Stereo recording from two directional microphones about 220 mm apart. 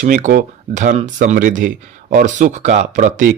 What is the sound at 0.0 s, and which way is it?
Speech, 35° right (ahead or behind).